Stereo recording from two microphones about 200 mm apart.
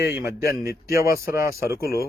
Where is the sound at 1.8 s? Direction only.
50° left (ahead or behind).